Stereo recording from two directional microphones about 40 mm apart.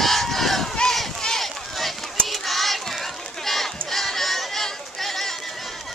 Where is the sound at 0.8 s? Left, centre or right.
Centre.